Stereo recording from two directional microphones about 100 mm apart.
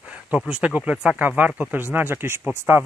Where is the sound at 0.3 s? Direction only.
15° right (ahead or behind).